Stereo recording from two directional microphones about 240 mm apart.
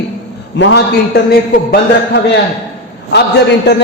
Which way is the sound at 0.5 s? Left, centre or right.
Left.